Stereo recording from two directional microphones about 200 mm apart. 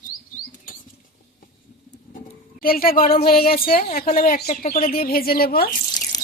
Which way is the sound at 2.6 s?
45° left (ahead or behind).